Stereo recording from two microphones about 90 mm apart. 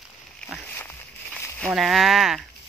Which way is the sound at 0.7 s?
25° left (ahead or behind).